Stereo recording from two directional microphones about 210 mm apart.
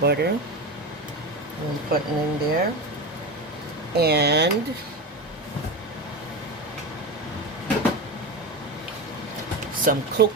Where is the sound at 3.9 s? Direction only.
50° right (ahead or behind).